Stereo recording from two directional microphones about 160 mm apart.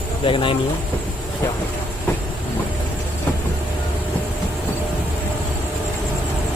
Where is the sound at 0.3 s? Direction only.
30° left (ahead or behind).